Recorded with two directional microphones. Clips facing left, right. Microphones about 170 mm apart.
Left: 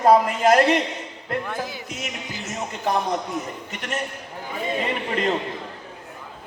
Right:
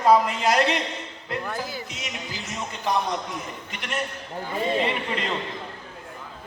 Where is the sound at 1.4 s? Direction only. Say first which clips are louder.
Left 1 dB; centre (ahead or behind).